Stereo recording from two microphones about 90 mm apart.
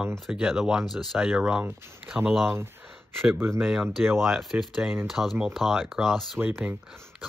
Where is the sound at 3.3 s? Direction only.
25° right (ahead or behind).